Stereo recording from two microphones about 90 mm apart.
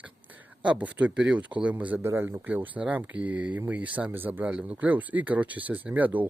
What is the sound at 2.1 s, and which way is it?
Speech, 30° right (ahead or behind).